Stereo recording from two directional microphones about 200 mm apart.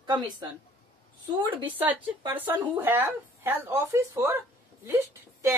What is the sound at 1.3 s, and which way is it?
Speech, 25° right (ahead or behind).